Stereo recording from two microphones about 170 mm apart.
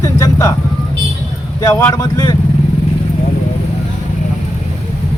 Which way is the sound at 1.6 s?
20° left (ahead or behind).